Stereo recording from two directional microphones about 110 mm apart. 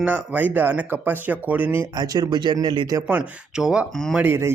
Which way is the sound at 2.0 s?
35° right (ahead or behind).